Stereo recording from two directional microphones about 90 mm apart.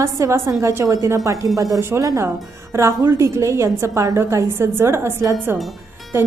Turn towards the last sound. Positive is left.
turn(degrees=-25)  # may be behind; listen again after turning